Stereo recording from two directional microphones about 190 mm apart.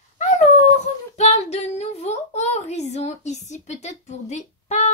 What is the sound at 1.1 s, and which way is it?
Speech, 35° left (ahead or behind).